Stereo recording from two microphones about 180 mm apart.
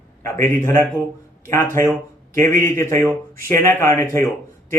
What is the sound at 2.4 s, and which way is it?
Speech, 15° left (ahead or behind).